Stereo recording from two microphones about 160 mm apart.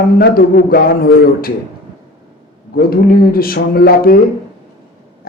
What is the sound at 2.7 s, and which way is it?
A man's voice, 70° left (ahead or behind).